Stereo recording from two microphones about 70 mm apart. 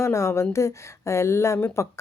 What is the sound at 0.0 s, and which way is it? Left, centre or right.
Speech, left.